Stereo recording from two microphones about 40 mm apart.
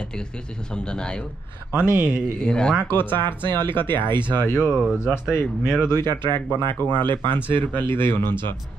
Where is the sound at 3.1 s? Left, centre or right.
Left.